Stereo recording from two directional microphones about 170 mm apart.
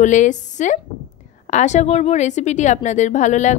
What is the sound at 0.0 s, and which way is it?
A woman's voice, 45° left (ahead or behind).